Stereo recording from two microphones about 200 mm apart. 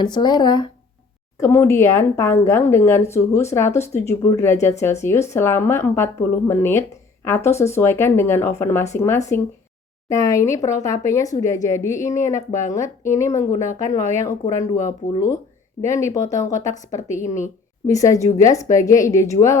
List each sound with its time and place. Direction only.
0.0 s speech: 20° left (ahead or behind)